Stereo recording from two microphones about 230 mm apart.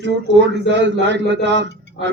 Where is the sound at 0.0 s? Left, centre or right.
Right.